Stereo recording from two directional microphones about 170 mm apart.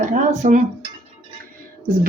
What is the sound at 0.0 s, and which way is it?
Dishes, 50° right (ahead or behind).